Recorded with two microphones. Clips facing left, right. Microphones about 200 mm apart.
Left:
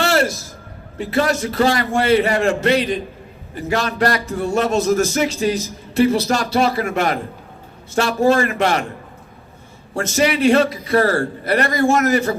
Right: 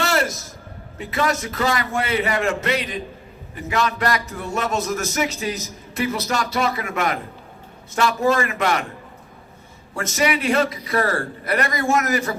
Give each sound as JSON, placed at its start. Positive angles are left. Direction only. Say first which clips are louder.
{"t": 0.0, "sound": "a sound", "louder": "left 4 dB", "side_deg": 30}
{"t": 0.9, "sound": "a man's voice", "louder": "left 4 dB", "side_deg": 30}
{"t": 9.9, "sound": "a man's voice", "louder": "left 4 dB", "side_deg": 30}